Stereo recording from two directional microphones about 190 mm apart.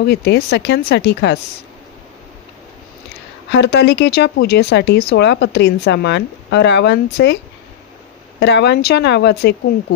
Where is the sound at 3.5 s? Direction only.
65° left (ahead or behind).